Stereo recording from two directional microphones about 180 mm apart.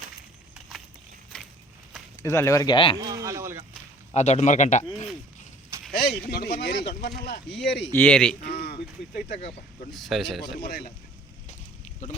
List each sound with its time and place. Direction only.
1.3 s a sound: 5° left (ahead or behind)
2.2 s speech: 15° left (ahead or behind)
3.0 s a sound: 20° right (ahead or behind)
4.1 s speech: 40° left (ahead or behind)
6.0 s speech: 60° left (ahead or behind)
7.9 s speech: 10° left (ahead or behind)
8.4 s speech: 65° left (ahead or behind)
9.3 s speech: 35° left (ahead or behind)
9.9 s speech: centre (ahead or behind)
10.6 s speech: 60° left (ahead or behind)